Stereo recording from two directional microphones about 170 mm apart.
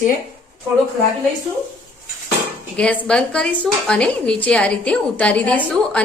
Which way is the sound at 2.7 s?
5° left (ahead or behind).